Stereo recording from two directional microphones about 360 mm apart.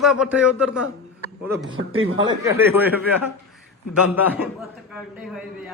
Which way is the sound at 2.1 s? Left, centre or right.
Centre.